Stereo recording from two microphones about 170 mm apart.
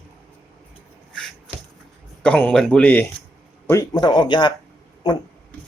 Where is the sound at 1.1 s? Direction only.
5° left (ahead or behind).